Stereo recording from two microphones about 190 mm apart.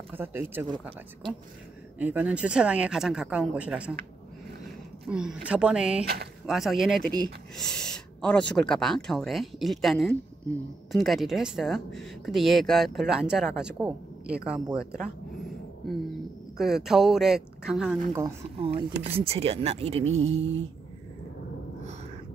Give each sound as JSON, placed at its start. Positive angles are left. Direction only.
{"t": 0.1, "sound": "speech", "side_deg": -10}
{"t": 2.0, "sound": "speech", "side_deg": -10}
{"t": 5.0, "sound": "speech", "side_deg": -5}
{"t": 16.5, "sound": "speech", "side_deg": 0}
{"t": 18.6, "sound": "speech", "side_deg": -30}